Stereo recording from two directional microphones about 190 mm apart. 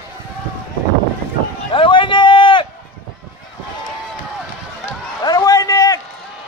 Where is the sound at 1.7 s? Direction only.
25° left (ahead or behind).